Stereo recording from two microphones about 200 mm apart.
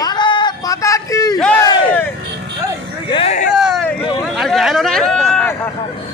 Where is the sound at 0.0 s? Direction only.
20° left (ahead or behind).